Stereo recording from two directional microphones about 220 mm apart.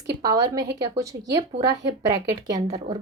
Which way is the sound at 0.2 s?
15° right (ahead or behind).